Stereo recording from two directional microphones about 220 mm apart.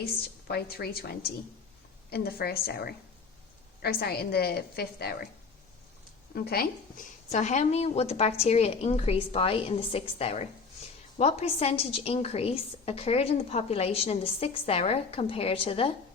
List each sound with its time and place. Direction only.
0.0 s a woman's voice: 45° left (ahead or behind)
6.3 s a woman's voice: 45° left (ahead or behind); by 15.9 s 25° left (ahead or behind)